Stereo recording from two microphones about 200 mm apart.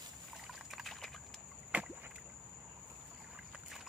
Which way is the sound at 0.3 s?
Centre (ahead or behind).